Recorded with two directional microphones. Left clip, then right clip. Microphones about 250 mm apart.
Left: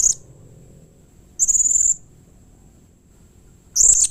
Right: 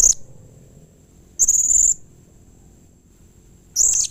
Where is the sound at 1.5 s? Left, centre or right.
Centre.